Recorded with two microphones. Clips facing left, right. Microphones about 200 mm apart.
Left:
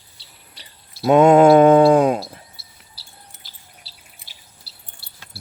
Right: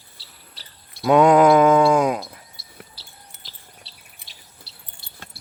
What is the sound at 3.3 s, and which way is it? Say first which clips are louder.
Chirp: right 2 dB; 60° right (ahead or behind).